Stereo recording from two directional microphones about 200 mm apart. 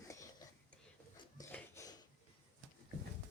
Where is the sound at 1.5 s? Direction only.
15° left (ahead or behind).